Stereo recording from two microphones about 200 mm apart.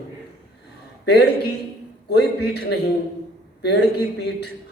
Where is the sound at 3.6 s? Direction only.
60° left (ahead or behind).